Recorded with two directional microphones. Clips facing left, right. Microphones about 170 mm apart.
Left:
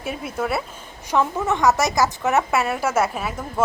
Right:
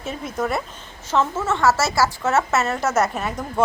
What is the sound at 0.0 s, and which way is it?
A woman's voice, 10° left (ahead or behind).